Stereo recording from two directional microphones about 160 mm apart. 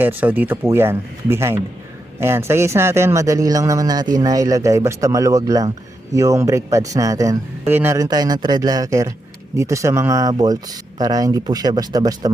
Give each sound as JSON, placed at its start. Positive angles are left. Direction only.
{"t": 0.0, "sound": "speech", "side_deg": -10}
{"t": 8.0, "sound": "speech", "side_deg": -25}